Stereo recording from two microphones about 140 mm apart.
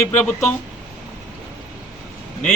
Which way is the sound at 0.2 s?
20° left (ahead or behind).